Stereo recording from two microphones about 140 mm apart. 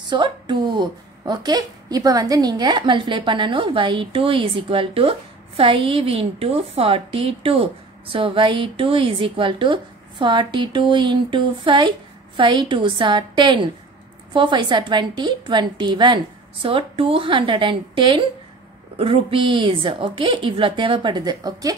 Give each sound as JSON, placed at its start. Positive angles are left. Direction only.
{"t": 0.1, "sound": "a woman's voice", "side_deg": -35}